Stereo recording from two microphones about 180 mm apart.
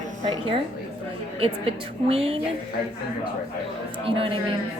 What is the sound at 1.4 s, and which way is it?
Speech, 30° right (ahead or behind).